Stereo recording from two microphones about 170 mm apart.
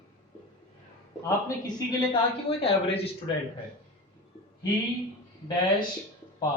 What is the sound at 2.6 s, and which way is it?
Speech, 35° left (ahead or behind).